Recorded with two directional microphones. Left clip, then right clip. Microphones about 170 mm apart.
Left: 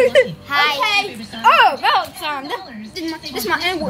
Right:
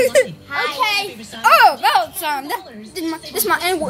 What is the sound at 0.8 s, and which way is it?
Speech, 70° right (ahead or behind).